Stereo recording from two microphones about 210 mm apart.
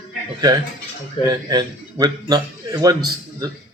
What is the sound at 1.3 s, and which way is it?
A man's voice, 20° right (ahead or behind).